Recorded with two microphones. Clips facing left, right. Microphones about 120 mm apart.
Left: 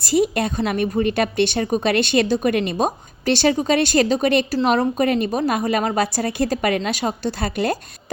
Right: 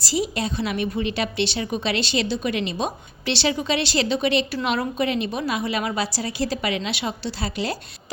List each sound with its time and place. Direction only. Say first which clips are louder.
0.0 s a woman's voice: left 6 dB; 55° left (ahead or behind)